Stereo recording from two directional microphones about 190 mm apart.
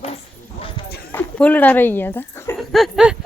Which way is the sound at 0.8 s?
25° left (ahead or behind).